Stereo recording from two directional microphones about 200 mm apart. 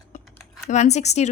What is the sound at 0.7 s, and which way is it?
Speech, 35° left (ahead or behind).